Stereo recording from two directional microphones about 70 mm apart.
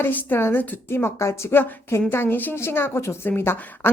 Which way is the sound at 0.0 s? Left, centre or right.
Left.